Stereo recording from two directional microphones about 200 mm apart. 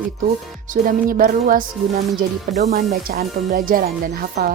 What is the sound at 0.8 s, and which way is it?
Speech, 45° right (ahead or behind).